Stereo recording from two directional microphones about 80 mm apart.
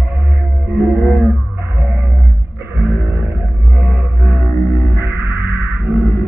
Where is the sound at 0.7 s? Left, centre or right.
Right.